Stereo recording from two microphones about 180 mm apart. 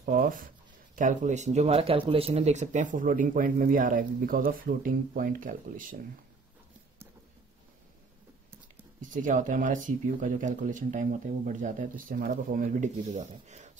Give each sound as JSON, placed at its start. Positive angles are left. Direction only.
{"t": 0.0, "sound": "speech", "side_deg": -50}
{"t": 9.0, "sound": "speech", "side_deg": -45}